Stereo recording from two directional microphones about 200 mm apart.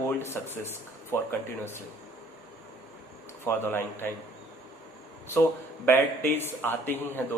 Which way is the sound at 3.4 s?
10° left (ahead or behind).